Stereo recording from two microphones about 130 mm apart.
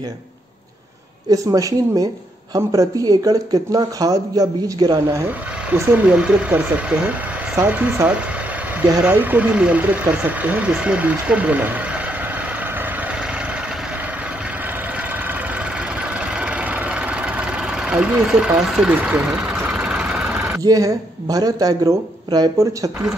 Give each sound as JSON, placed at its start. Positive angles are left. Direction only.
{"t": 1.3, "sound": "speech", "side_deg": -25}
{"t": 5.2, "sound": "speech", "side_deg": -15}
{"t": 16.3, "sound": "engine", "side_deg": -10}
{"t": 20.4, "sound": "speech", "side_deg": -25}